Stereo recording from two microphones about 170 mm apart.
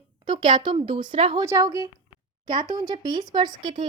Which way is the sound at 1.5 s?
20° right (ahead or behind).